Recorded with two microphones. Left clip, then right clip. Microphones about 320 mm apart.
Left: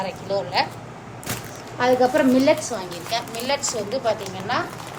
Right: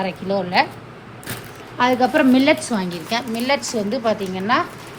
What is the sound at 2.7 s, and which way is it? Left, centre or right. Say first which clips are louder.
A woman's voice: right 3 dB; right.